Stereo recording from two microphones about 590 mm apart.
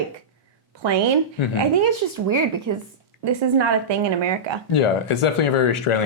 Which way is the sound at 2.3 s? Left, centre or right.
Right.